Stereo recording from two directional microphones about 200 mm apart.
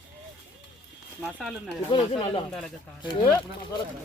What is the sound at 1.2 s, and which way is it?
Speech, centre (ahead or behind).